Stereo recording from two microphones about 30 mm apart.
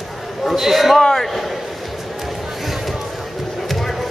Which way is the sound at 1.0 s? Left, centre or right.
Centre.